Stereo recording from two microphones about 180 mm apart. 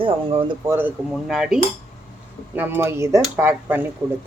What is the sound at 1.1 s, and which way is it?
Speech, centre (ahead or behind).